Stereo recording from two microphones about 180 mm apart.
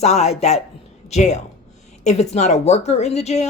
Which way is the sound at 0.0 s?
35° left (ahead or behind).